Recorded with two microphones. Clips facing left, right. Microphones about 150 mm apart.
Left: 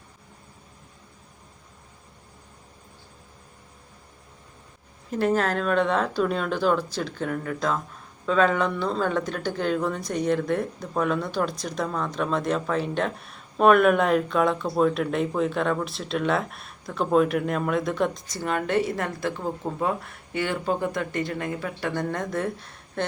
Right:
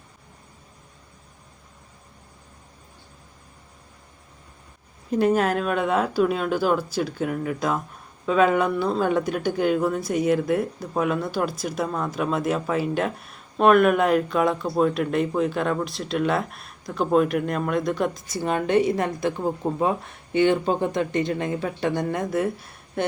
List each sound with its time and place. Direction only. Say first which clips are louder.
5.1 s speech: right 3 dB; 15° right (ahead or behind)
18.3 s speech: right 4 dB; 20° right (ahead or behind)
22.0 s speech: right 3 dB; 10° right (ahead or behind)